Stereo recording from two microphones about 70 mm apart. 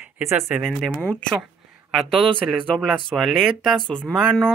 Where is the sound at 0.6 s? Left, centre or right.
Centre.